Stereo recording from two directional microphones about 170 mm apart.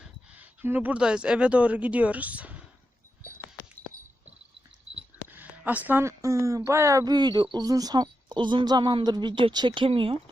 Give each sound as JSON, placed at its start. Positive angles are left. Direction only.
{"t": 0.0, "sound": "speech", "side_deg": -5}
{"t": 5.3, "sound": "a woman's voice", "side_deg": -10}